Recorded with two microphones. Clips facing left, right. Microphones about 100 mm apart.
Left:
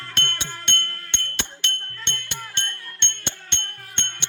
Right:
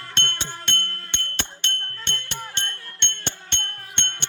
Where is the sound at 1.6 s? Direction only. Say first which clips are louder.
Even; 35° right (ahead or behind).